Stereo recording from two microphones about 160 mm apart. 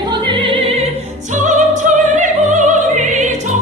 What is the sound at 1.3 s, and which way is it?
Opera, 50° right (ahead or behind).